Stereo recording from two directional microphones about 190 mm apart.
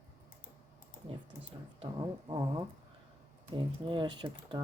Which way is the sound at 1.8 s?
25° right (ahead or behind).